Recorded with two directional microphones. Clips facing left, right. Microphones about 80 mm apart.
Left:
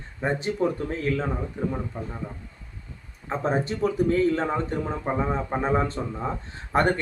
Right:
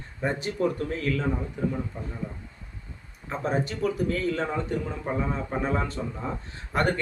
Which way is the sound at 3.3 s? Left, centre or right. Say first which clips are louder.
Left 3 dB; left.